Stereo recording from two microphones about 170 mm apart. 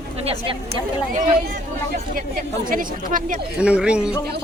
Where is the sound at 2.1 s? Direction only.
55° right (ahead or behind).